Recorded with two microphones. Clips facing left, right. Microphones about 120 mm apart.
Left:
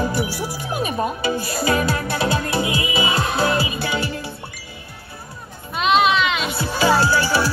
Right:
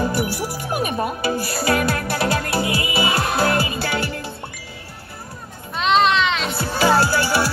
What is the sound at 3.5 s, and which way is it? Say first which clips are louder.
Music: even; 15° left (ahead or behind).